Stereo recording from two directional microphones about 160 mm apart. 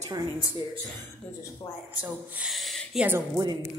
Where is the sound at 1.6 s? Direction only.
20° left (ahead or behind).